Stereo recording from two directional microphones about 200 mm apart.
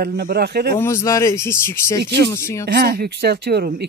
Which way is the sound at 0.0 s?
50° right (ahead or behind).